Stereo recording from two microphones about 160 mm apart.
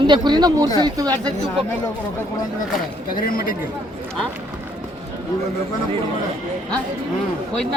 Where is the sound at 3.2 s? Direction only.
65° left (ahead or behind).